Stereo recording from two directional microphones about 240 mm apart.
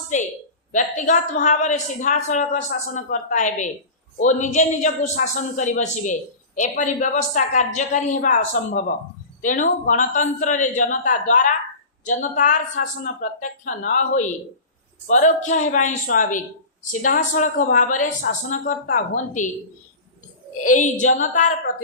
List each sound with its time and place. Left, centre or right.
0.1 s a woman's voice: left
20.7 s a woman's voice: left